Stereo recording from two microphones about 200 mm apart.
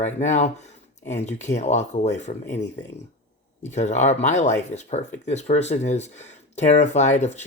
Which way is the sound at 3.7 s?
35° left (ahead or behind).